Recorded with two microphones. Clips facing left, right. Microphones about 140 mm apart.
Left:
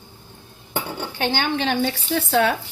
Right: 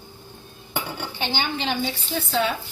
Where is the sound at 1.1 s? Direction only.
55° left (ahead or behind).